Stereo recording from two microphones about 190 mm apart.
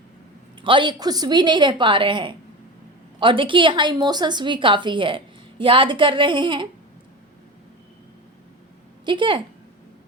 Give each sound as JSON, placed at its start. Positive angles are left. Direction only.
{"t": 0.6, "sound": "a woman's voice", "side_deg": -25}
{"t": 9.0, "sound": "a woman's voice", "side_deg": -25}